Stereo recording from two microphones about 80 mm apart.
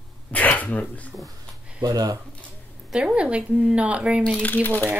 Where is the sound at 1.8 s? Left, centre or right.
Right.